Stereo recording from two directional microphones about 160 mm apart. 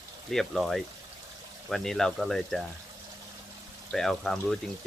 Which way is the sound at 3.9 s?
Centre (ahead or behind).